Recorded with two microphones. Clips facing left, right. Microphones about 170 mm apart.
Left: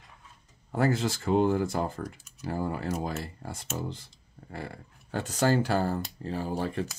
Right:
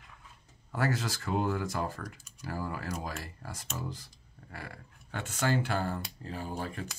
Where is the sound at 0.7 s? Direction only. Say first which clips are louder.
Left 5 dB; 30° left (ahead or behind).